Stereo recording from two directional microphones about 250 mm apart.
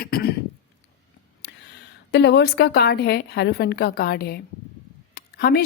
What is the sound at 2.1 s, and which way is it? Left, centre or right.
Speech, left.